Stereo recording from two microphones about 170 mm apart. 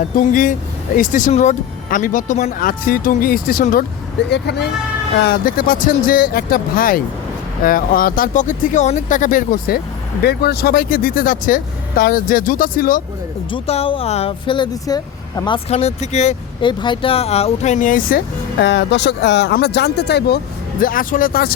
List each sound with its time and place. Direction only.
0.2 s speech: 50° left (ahead or behind)
4.3 s speech: 75° left (ahead or behind)
5.2 s speech: 60° left (ahead or behind)
13.5 s speech: 35° left (ahead or behind)
16.6 s speech: 30° left (ahead or behind); by 18.2 s 55° left (ahead or behind)
18.6 s speech: 90° left; by 21.5 s 60° left (ahead or behind)